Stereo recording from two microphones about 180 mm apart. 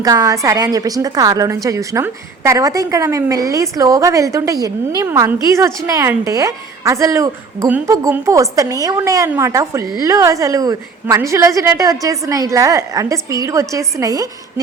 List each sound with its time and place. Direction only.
0.0 s a woman's voice: 20° right (ahead or behind)